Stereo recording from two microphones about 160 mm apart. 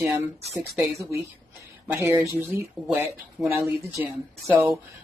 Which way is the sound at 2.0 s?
15° right (ahead or behind).